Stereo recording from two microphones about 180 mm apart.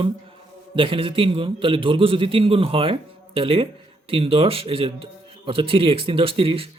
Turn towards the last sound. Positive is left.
turn(degrees=-30)  # may be behind; listen again after turning